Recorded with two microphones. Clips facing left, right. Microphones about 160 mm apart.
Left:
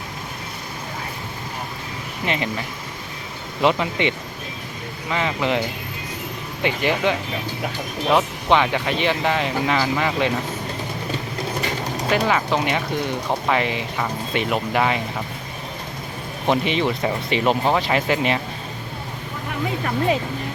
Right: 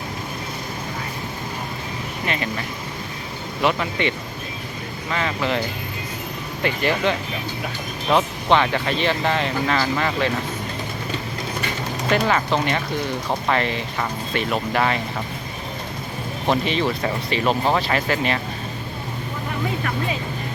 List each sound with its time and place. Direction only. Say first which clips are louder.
2.2 s speech: left 2 dB; 20° left (ahead or behind)
3.6 s speech: left 2 dB; 20° left (ahead or behind)
5.1 s speech: left 1 dB; 15° left (ahead or behind)
12.1 s speech: even; 5° left (ahead or behind)
16.5 s speech: left 1 dB; 15° left (ahead or behind)